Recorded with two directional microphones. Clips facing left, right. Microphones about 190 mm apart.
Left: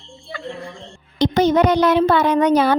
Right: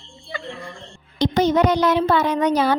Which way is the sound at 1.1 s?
60° left (ahead or behind).